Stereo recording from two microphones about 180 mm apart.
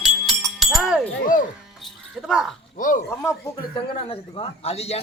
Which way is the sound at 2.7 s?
45° left (ahead or behind).